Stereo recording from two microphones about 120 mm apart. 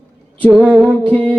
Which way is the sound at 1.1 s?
15° left (ahead or behind).